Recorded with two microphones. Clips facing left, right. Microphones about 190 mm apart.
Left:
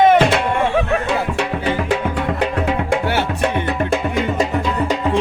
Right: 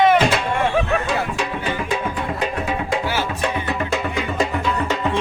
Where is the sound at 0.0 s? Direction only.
55° left (ahead or behind).